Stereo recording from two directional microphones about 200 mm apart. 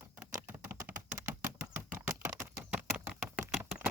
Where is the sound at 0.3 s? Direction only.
10° right (ahead or behind).